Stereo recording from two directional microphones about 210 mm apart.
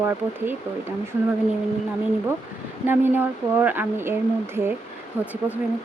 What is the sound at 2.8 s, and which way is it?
Speech, 10° right (ahead or behind).